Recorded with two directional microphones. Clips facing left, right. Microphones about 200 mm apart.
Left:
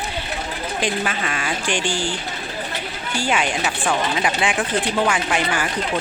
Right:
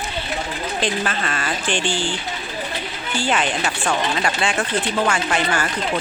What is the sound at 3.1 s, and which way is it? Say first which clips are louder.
Speech: even; 10° left (ahead or behind).